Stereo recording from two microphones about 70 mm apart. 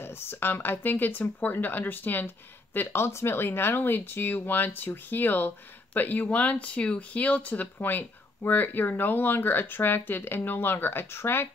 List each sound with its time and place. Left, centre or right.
0.0 s speech: left